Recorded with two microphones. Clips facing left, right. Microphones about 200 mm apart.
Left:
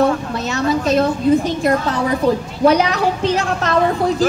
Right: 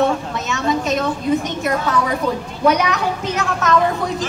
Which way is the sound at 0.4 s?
30° left (ahead or behind).